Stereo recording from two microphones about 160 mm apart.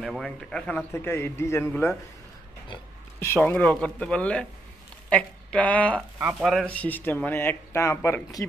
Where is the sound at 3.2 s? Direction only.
10° left (ahead or behind).